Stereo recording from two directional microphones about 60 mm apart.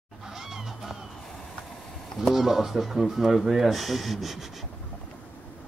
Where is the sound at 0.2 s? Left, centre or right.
Centre.